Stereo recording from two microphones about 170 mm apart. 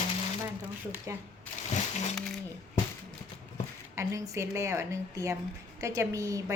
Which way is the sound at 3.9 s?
20° right (ahead or behind).